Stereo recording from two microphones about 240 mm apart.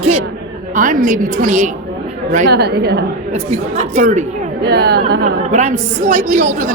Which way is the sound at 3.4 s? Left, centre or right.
Right.